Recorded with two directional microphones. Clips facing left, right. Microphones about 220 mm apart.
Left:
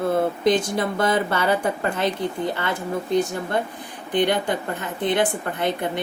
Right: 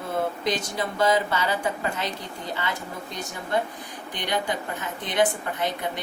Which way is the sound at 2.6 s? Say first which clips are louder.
Left 6 dB; 55° left (ahead or behind).